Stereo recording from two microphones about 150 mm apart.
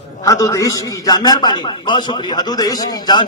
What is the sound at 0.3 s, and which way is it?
A man's voice, 20° left (ahead or behind).